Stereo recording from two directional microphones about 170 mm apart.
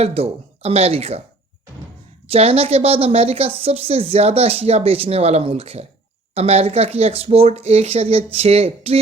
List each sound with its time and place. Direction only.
0.0 s speech: 35° right (ahead or behind)
2.3 s speech: 35° right (ahead or behind)